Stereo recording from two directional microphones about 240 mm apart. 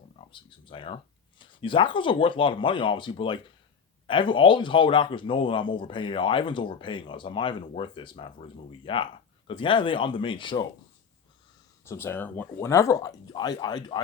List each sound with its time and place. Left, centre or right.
0.3 s speech: left
11.9 s speech: centre